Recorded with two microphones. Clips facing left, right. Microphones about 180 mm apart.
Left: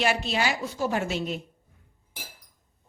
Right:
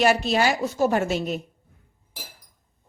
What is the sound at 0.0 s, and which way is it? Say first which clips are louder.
A woman's voice: right 6 dB; 40° right (ahead or behind).